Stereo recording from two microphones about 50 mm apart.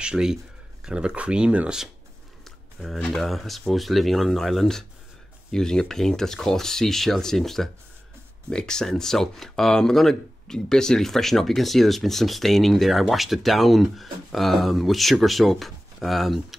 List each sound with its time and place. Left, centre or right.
0.0 s speech: centre
2.4 s a sound: centre
3.1 s speech: centre